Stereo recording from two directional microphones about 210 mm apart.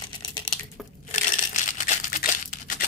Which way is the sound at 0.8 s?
Centre (ahead or behind).